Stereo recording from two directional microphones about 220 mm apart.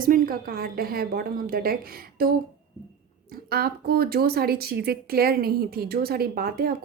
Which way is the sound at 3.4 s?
45° right (ahead or behind).